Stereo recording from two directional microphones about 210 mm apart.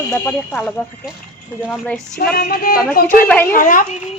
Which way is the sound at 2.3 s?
45° left (ahead or behind).